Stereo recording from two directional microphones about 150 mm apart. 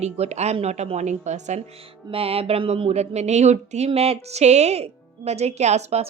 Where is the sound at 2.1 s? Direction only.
40° right (ahead or behind).